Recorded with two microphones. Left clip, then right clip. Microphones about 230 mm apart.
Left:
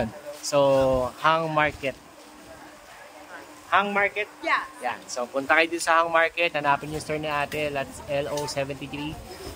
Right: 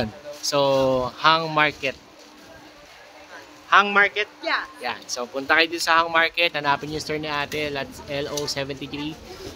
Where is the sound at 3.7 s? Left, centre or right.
Centre.